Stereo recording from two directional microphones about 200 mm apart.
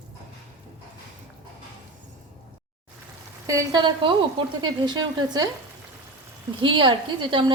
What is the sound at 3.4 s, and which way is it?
Speech, 20° right (ahead or behind).